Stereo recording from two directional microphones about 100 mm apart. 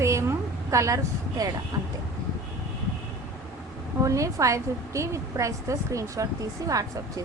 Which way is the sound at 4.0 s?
35° right (ahead or behind).